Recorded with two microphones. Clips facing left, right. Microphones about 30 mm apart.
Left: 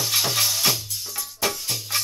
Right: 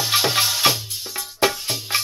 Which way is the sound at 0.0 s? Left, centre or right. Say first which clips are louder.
Right 4 dB; right.